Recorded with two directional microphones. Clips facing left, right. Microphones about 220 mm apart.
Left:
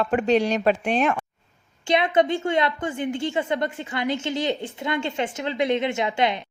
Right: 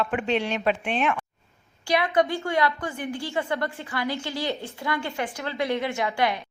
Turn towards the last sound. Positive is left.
turn(degrees=20)  # may be behind; listen again after turning